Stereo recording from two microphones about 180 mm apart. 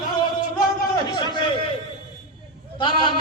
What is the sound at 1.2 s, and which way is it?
Speech, 25° left (ahead or behind).